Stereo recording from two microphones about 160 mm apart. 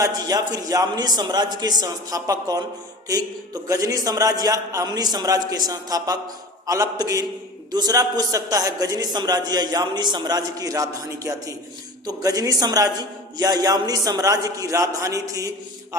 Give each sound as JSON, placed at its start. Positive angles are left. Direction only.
{"t": 0.0, "sound": "a man's voice", "side_deg": -25}